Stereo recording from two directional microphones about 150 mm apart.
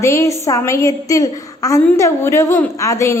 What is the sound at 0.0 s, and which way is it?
A woman's voice, 20° left (ahead or behind).